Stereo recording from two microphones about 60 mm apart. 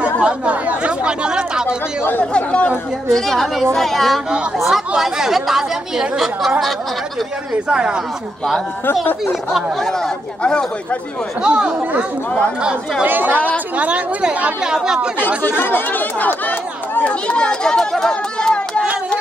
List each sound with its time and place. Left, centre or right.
0.0 s speech: right
2.3 s a woman's voice: centre
3.1 s a woman's voice: centre
7.6 s speech: centre
10.4 s speech: centre
11.4 s speech: centre
13.0 s speech: right
13.7 s speech: right
15.1 s speech: left; by 18.6 s centre